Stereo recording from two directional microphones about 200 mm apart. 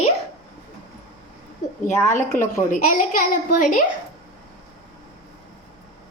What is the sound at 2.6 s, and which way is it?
A child's voice, 40° left (ahead or behind).